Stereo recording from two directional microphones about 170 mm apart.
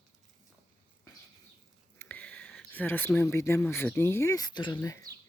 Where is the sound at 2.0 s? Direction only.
10° left (ahead or behind).